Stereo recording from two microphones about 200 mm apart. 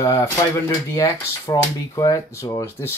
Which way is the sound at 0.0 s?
15° left (ahead or behind).